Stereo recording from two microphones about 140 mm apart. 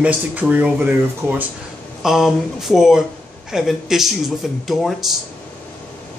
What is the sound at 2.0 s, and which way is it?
Speech, centre (ahead or behind).